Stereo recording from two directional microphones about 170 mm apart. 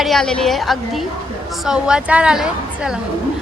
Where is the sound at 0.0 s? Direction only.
Centre (ahead or behind).